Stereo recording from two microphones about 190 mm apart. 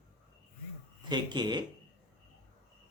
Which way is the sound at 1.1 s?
25° right (ahead or behind).